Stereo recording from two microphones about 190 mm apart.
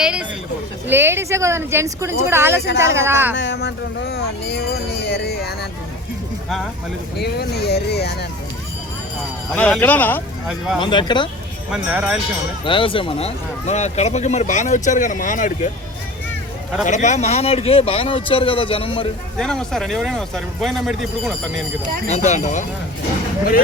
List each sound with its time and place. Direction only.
0.0 s speech: 5° right (ahead or behind)
3.3 s speech: 65° left (ahead or behind)
7.2 s speech: 55° left (ahead or behind)
9.5 s speech: 5° left (ahead or behind)
10.8 s a man's voice: 25° left (ahead or behind)
11.7 s speech: 5° right (ahead or behind)
12.6 s speech: 25° left (ahead or behind); by 15.7 s 45° left (ahead or behind)
16.8 s a man's voice: 40° left (ahead or behind)
19.4 s speech: centre (ahead or behind)
22.0 s speech: 35° left (ahead or behind)